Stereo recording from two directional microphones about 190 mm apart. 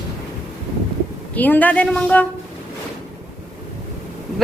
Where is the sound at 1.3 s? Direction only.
10° left (ahead or behind).